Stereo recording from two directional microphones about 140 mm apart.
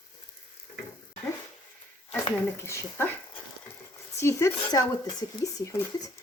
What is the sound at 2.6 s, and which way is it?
Speech, 20° left (ahead or behind).